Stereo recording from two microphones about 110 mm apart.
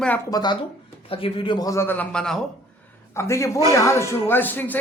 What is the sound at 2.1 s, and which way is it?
Speech, 5° left (ahead or behind).